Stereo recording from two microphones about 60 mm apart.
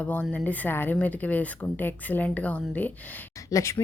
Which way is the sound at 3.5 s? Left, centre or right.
Left.